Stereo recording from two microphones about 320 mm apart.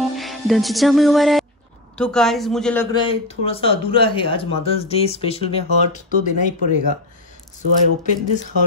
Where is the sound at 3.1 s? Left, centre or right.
Centre.